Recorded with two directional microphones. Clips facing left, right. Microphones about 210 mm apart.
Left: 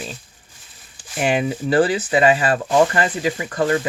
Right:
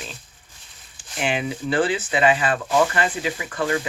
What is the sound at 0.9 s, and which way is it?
Speech, 40° left (ahead or behind).